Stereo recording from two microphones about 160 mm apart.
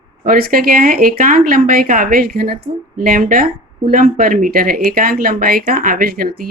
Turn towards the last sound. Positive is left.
turn(degrees=-70)  # may be behind; listen again after turning